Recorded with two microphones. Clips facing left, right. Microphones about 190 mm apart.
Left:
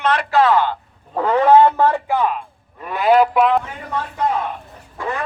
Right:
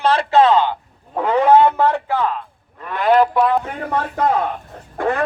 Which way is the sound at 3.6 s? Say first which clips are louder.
Right 4 dB; 50° right (ahead or behind).